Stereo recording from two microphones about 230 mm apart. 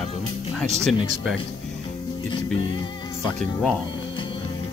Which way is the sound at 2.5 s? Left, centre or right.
Left.